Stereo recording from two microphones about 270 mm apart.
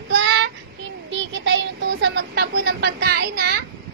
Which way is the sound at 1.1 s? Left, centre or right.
Right.